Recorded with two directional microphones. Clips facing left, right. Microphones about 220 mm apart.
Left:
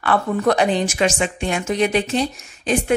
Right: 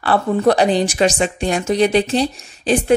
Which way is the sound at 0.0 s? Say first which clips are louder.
Right 3 dB; 35° right (ahead or behind).